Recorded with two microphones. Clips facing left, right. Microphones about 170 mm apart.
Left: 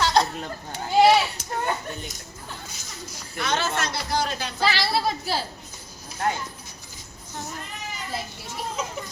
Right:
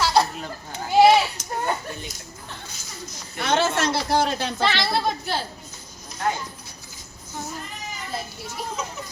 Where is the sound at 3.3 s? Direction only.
50° right (ahead or behind).